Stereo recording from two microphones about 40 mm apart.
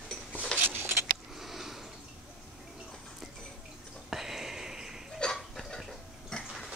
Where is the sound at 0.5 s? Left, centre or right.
Right.